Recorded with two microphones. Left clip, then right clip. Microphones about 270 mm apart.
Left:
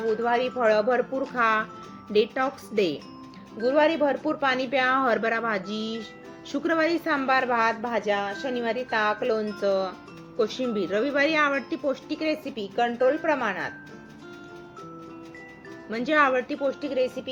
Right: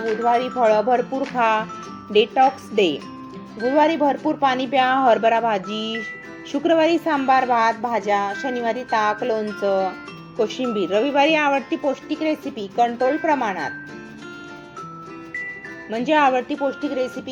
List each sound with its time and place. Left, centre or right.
0.0 s speech: centre
15.9 s speech: centre